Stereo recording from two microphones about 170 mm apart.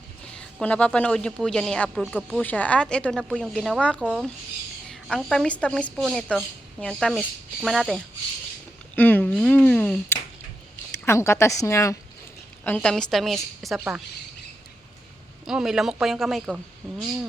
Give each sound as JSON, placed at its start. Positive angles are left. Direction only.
{"t": 0.3, "sound": "a woman's voice", "side_deg": 10}
{"t": 9.0, "sound": "a sound", "side_deg": 10}
{"t": 11.0, "sound": "a woman's voice", "side_deg": 15}
{"t": 15.4, "sound": "a woman's voice", "side_deg": -5}